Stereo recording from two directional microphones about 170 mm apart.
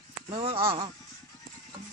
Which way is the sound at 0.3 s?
35° right (ahead or behind).